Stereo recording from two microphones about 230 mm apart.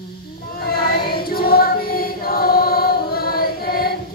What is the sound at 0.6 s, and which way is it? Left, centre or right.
Choir, left.